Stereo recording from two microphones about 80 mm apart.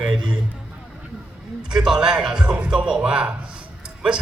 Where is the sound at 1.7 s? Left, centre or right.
Centre.